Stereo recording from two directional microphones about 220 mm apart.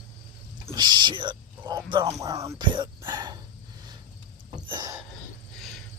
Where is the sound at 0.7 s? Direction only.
20° right (ahead or behind).